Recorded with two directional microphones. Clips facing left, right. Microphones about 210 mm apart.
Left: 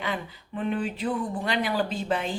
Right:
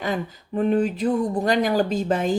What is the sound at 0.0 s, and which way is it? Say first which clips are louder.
A woman's voice: right 6 dB; 40° right (ahead or behind).